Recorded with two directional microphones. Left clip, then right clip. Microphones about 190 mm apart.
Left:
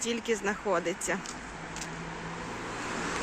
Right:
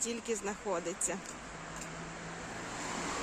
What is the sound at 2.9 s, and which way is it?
Vehicle, 65° right (ahead or behind).